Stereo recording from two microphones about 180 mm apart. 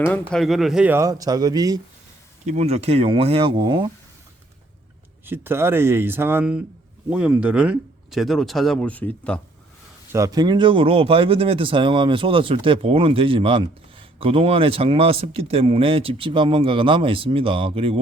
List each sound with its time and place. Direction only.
0.0 s speech: 5° left (ahead or behind); by 1.8 s 20° right (ahead or behind)
2.5 s speech: 35° right (ahead or behind)
5.2 s speech: 10° right (ahead or behind); by 9.4 s 5° left (ahead or behind)
10.1 s speech: 20° right (ahead or behind)